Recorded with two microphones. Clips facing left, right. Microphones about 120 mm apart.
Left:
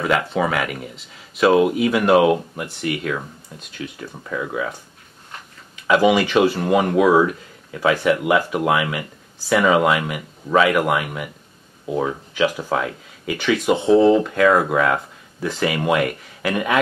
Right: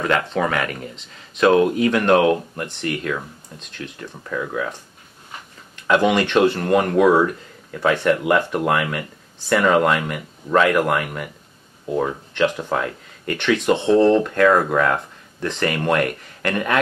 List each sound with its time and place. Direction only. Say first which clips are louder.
0.0 s speech: left 1 dB; 5° left (ahead or behind)
5.8 s speech: left 1 dB; centre (ahead or behind)